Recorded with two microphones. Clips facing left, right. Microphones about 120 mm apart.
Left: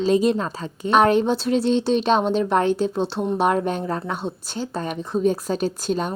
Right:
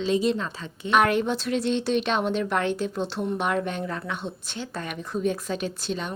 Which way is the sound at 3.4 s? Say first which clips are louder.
Left 8 dB; 35° left (ahead or behind).